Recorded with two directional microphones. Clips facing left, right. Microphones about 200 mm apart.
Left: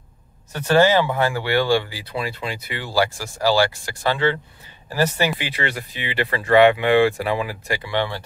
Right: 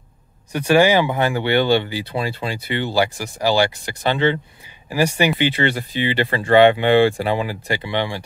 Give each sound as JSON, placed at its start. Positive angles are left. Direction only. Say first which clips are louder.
{"t": 0.5, "sound": "speech", "louder": "right 1 dB", "side_deg": -15}
{"t": 5.4, "sound": "speech", "louder": "right 8 dB", "side_deg": -30}